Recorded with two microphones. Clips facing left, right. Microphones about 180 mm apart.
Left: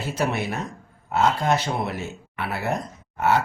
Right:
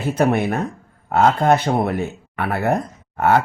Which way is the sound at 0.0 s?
55° right (ahead or behind).